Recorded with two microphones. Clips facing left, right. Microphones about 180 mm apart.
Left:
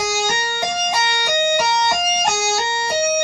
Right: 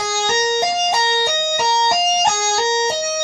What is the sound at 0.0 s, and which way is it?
Music, 15° left (ahead or behind).